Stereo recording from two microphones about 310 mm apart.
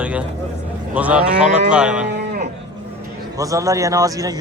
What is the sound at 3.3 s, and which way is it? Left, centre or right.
A man's voice, centre.